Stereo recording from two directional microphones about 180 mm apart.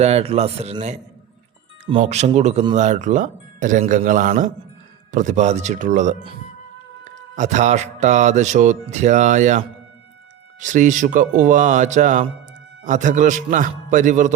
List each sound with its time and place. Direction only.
0.0 s speech: 35° right (ahead or behind)
2.0 s a man's voice: 40° right (ahead or behind)